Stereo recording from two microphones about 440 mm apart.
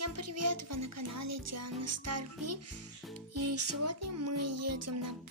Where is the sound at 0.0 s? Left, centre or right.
Right.